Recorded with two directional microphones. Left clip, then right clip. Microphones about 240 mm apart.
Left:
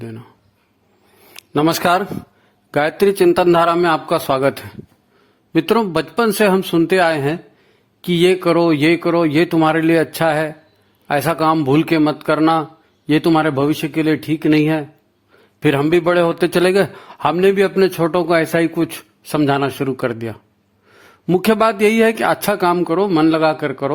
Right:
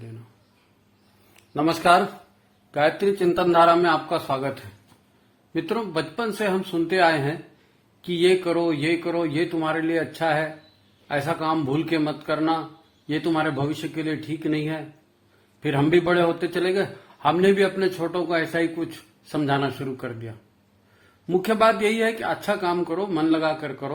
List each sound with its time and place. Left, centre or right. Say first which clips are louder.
1.3 s a man's voice: left 7 dB; left